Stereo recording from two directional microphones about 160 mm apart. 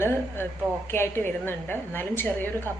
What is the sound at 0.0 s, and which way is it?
A woman's voice, 15° left (ahead or behind).